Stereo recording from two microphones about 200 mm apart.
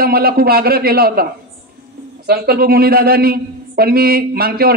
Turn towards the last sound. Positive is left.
turn(degrees=-50)  # may be behind; listen again after turning